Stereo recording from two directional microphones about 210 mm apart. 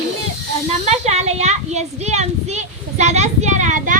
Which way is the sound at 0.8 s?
30° right (ahead or behind).